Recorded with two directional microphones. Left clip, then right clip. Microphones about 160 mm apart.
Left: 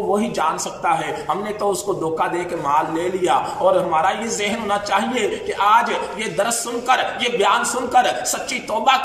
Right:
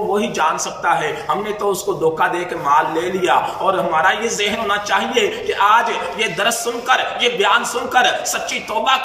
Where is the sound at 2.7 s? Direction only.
25° left (ahead or behind).